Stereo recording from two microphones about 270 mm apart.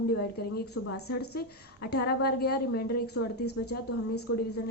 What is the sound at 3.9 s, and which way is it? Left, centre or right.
Speech, left.